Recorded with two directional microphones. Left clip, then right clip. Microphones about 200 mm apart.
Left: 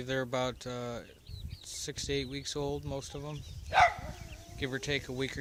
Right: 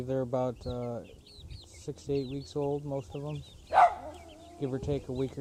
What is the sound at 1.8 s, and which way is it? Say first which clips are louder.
Speech: right 2 dB; 15° left (ahead or behind).